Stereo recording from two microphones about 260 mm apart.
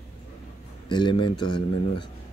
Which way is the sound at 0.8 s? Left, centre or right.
Centre.